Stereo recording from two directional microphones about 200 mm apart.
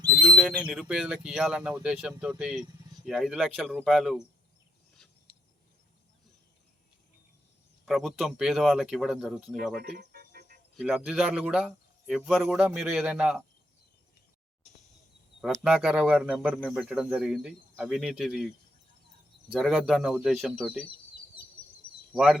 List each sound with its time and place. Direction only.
0.2 s speech: centre (ahead or behind)
7.9 s speech: centre (ahead or behind)
10.0 s music: 50° right (ahead or behind)
10.8 s speech: centre (ahead or behind)
15.4 s speech: centre (ahead or behind)
19.5 s speech: centre (ahead or behind)
22.1 s speech: centre (ahead or behind)